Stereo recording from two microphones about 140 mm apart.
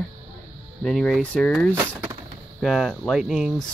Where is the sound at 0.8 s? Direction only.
5° left (ahead or behind).